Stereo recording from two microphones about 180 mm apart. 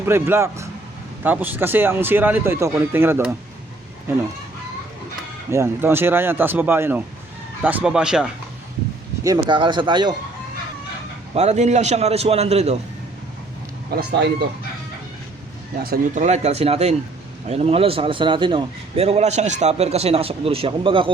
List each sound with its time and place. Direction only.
0.0 s speech: 15° right (ahead or behind)
5.5 s speech: 15° right (ahead or behind)
9.2 s speech: 25° right (ahead or behind)
11.3 s a man's voice: 40° right (ahead or behind)
15.8 s speech: 55° right (ahead or behind)
16.2 s a man's voice: 40° right (ahead or behind)